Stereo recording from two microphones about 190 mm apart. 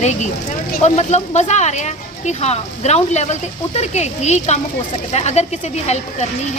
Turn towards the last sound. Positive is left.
turn(degrees=35)  # may be behind; listen again after turning